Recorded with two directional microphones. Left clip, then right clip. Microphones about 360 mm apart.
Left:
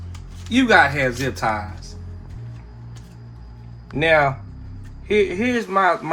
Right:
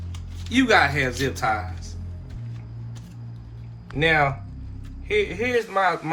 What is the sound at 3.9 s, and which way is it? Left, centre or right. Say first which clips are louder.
Speech: left 4 dB; left.